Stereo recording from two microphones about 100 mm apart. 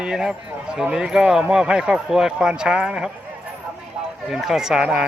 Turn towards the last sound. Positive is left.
turn(degrees=-10)  # may be behind; listen again after turning